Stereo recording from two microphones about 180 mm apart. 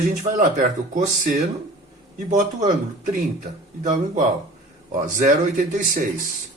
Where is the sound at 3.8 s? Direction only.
45° right (ahead or behind).